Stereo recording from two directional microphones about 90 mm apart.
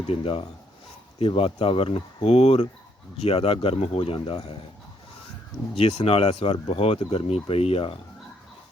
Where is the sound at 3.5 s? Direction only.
90° left.